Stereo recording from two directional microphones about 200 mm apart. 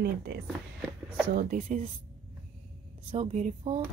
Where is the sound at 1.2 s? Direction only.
45° right (ahead or behind).